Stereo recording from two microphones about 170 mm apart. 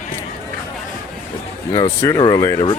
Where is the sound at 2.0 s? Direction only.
20° left (ahead or behind).